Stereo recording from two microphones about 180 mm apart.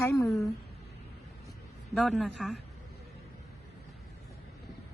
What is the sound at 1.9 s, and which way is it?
Speech, centre (ahead or behind).